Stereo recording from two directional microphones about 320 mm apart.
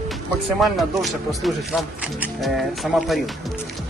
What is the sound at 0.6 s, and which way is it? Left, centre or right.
Speech, centre.